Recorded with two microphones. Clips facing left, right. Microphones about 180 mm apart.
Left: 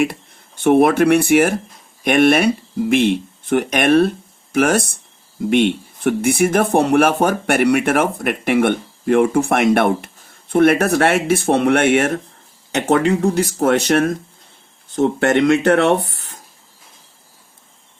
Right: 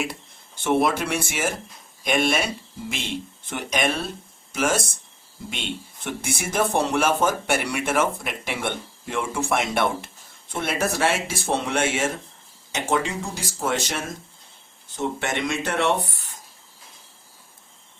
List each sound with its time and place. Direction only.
0.6 s speech: 55° left (ahead or behind)